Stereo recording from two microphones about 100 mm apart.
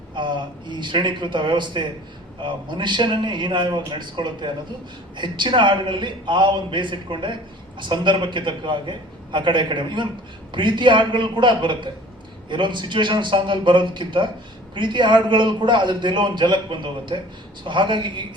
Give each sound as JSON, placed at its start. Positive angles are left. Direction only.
{"t": 0.2, "sound": "a man's voice", "side_deg": -50}